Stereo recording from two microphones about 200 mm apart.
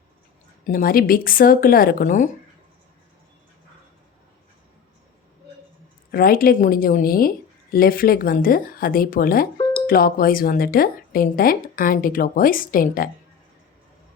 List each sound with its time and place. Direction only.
0.6 s a woman's voice: 45° left (ahead or behind)
6.1 s a woman's voice: 45° left (ahead or behind)